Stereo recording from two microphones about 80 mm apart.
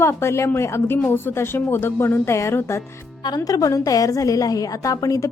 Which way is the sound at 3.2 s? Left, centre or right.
Left.